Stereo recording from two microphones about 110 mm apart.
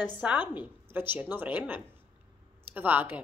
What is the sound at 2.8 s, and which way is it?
Speech, 15° right (ahead or behind).